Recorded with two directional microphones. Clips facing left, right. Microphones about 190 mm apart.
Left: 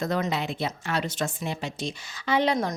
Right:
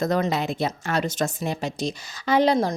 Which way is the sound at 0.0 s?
40° right (ahead or behind).